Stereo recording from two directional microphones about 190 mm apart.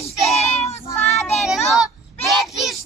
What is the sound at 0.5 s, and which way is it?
Child singing, 35° left (ahead or behind).